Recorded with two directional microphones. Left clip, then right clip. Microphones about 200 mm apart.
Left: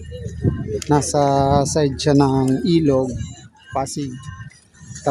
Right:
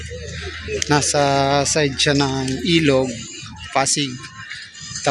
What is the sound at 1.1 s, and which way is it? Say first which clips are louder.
Speech: left 1 dB; 5° left (ahead or behind).